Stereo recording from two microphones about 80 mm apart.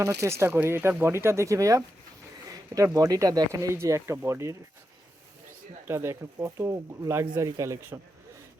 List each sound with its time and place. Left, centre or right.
0.2 s speech: right
5.9 s speech: right